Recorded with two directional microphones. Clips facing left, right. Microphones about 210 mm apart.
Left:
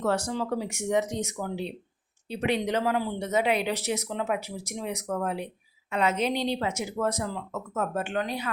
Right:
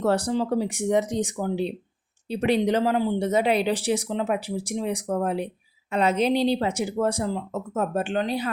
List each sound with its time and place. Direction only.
0.0 s speech: 35° right (ahead or behind)